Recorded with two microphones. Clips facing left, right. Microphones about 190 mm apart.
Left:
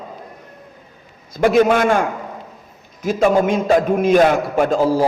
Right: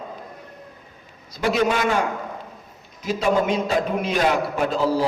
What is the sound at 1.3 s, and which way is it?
Speech, 50° left (ahead or behind).